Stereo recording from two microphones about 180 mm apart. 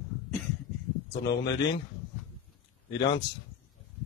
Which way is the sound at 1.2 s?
70° left (ahead or behind).